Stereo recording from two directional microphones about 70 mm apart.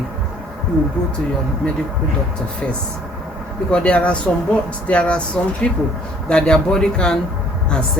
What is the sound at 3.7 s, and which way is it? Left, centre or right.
Speech, centre.